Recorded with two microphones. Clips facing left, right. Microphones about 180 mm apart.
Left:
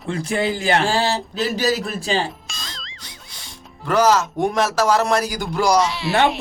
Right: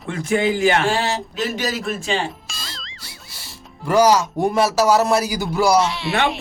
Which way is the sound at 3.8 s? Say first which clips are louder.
Right 2 dB; 10° right (ahead or behind).